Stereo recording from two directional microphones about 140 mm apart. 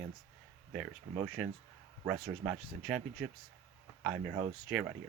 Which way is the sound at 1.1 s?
10° right (ahead or behind).